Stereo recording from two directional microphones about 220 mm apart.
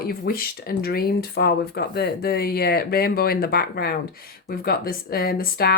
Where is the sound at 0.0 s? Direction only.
45° left (ahead or behind).